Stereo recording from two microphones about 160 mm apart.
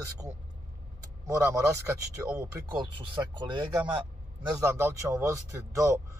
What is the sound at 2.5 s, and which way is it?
Speech, 25° right (ahead or behind).